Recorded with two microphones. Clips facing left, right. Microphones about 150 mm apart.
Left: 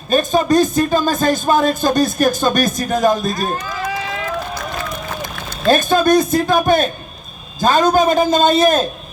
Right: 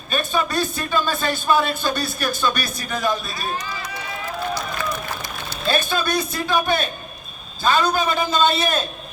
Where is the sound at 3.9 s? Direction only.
90° left.